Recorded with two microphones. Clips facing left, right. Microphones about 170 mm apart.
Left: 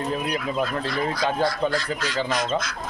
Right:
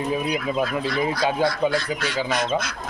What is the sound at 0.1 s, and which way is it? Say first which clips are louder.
Speech: right 2 dB; 5° right (ahead or behind).